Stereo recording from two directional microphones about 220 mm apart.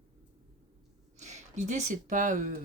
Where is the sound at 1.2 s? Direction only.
30° right (ahead or behind).